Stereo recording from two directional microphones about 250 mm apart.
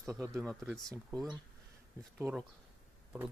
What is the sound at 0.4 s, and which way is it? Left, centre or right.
Speech, centre.